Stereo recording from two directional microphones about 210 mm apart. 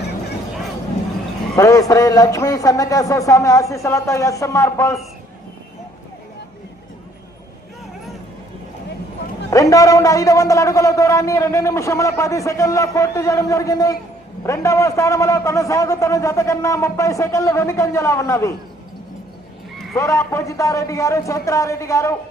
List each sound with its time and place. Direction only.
1.5 s a man's voice: 15° left (ahead or behind)
9.5 s a man's voice: 15° left (ahead or behind)
20.0 s a man's voice: 15° left (ahead or behind)